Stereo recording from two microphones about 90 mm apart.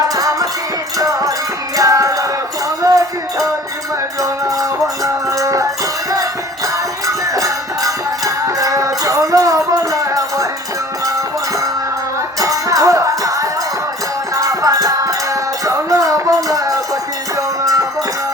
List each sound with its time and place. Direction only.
0.1 s music: 40° right (ahead or behind)
12.4 s music: 40° right (ahead or behind)